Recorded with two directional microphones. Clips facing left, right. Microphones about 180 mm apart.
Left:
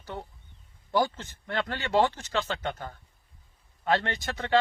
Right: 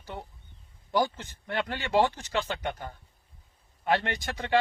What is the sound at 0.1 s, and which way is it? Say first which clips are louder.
Speech: left 2 dB; 15° right (ahead or behind).